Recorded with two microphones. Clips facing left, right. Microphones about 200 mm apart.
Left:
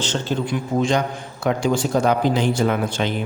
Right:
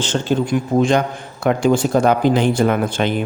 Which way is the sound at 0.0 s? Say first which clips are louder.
Right 5 dB; 50° right (ahead or behind).